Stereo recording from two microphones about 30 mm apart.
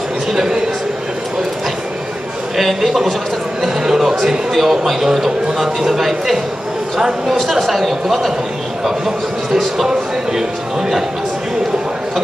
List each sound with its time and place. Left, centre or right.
0.3 s speech: centre
2.5 s speech: centre
4.0 s a sound: centre
4.6 s speech: centre
5.0 s speech: centre
7.4 s speech: centre
8.8 s speech: centre